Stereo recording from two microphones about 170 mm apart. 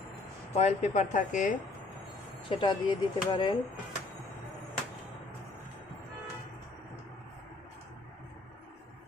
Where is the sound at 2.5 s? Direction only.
30° left (ahead or behind).